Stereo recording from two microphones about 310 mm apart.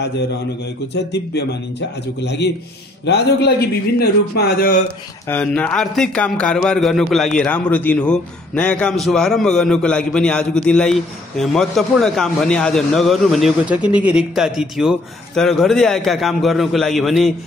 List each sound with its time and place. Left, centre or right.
1.1 s a man's voice: left
5.3 s a man's voice: centre